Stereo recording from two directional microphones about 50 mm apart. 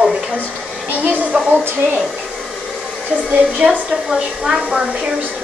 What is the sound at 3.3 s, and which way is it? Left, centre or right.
A woman's voice, right.